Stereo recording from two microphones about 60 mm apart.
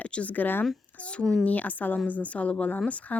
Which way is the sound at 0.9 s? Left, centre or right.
Centre.